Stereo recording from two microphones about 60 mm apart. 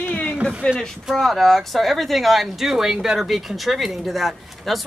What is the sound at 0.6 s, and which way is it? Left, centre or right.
Speech, centre.